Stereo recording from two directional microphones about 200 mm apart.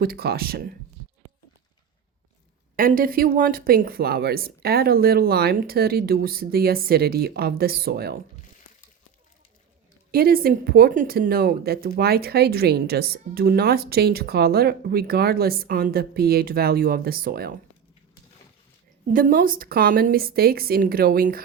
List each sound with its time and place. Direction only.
0.0 s speech: 50° right (ahead or behind)
2.7 s speech: 45° right (ahead or behind)
10.1 s speech: 50° right (ahead or behind)
19.1 s speech: 45° right (ahead or behind)